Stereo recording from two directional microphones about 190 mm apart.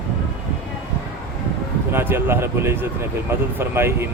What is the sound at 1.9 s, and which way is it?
Speech, 10° right (ahead or behind).